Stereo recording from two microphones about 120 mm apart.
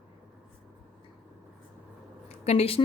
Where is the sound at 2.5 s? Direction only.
55° left (ahead or behind).